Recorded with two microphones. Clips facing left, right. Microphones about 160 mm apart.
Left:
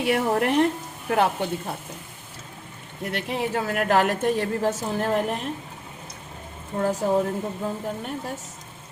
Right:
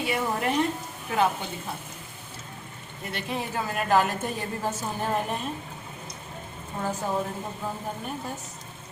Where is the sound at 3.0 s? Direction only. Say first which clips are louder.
Left 5 dB; 70° left (ahead or behind); by 5.0 s 90° left.